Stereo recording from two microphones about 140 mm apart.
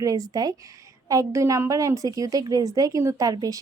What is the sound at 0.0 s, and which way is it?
Speech, 25° right (ahead or behind).